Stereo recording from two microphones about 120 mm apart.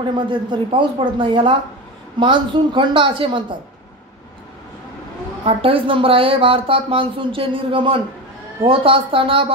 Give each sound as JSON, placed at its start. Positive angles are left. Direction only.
{"t": 0.3, "sound": "a woman's voice", "side_deg": -40}
{"t": 5.4, "sound": "a woman's voice", "side_deg": -50}